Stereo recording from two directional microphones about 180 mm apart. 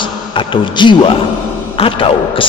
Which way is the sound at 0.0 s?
25° left (ahead or behind).